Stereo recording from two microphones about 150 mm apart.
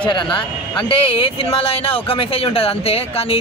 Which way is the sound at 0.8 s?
35° left (ahead or behind).